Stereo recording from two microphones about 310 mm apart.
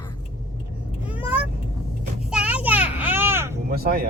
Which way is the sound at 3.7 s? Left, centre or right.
Right.